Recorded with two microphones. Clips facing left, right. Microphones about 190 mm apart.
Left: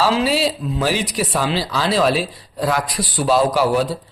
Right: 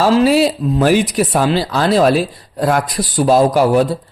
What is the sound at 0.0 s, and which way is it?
Speech, 50° right (ahead or behind).